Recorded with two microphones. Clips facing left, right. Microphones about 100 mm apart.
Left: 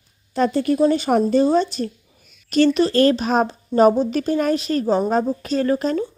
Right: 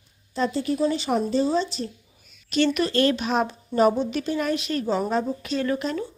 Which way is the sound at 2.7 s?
35° left (ahead or behind).